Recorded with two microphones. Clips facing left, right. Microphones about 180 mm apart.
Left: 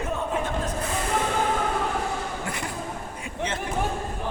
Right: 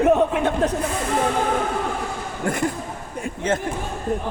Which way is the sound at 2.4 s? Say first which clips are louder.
Right 9 dB; 50° right (ahead or behind).